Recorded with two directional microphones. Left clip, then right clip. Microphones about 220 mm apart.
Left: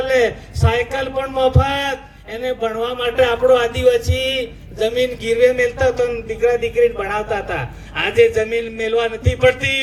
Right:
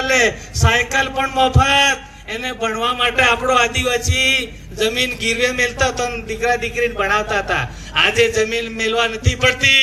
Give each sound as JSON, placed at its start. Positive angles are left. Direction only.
{"t": 0.6, "sound": "a man's voice", "side_deg": 50}